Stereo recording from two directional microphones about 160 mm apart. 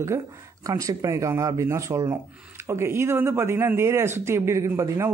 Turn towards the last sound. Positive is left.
turn(degrees=-15)  # may be behind; listen again after turning